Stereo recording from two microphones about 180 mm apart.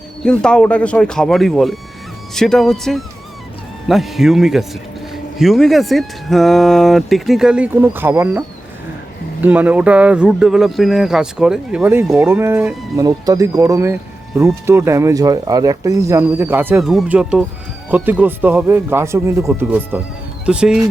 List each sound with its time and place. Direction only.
0.3 s speech: 5° left (ahead or behind); by 16.8 s 10° right (ahead or behind)
16.8 s speech: centre (ahead or behind)